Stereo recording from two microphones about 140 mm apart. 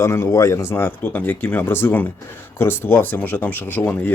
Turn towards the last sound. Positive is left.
turn(degrees=10)  # may be behind; listen again after turning